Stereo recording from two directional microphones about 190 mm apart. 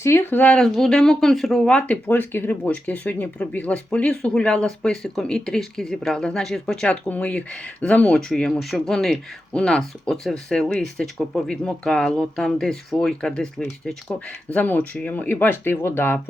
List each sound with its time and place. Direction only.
0.0 s speech: 15° left (ahead or behind)